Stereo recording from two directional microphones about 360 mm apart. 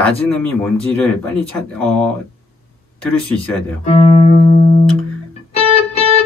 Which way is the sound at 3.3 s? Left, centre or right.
Centre.